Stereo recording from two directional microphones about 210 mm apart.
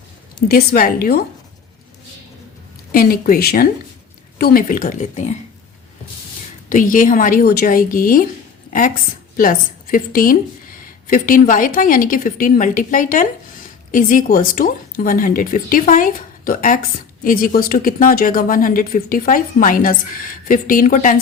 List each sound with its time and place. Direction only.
0.4 s a woman's voice: 45° left (ahead or behind)
2.9 s a woman's voice: 45° left (ahead or behind)
6.7 s a woman's voice: 40° left (ahead or behind)
9.4 s a woman's voice: 40° left (ahead or behind)